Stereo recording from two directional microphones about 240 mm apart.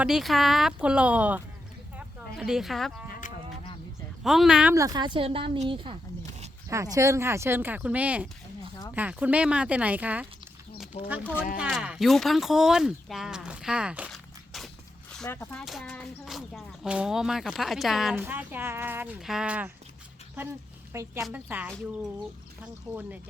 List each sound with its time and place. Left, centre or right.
0.0 s speech: centre
3.1 s a sound: left
4.2 s a woman's voice: centre
11.2 s speech: centre
11.5 s speech: centre
20.9 s speech: centre